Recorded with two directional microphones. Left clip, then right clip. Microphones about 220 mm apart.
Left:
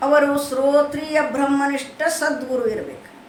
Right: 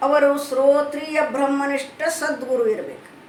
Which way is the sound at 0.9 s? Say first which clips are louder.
Left 1 dB; 15° left (ahead or behind).